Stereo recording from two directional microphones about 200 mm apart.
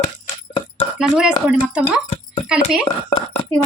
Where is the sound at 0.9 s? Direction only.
5° right (ahead or behind).